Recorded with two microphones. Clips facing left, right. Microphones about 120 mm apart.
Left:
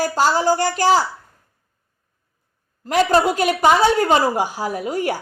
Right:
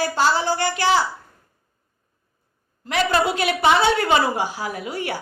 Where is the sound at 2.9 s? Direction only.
45° left (ahead or behind).